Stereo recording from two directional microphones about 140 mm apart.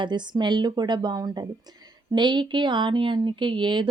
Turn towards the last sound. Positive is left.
turn(degrees=-35)  # may be behind; listen again after turning